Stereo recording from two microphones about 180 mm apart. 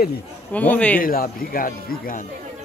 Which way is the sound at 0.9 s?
55° left (ahead or behind).